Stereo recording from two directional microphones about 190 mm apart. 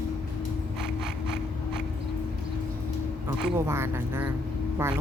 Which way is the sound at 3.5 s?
15° right (ahead or behind).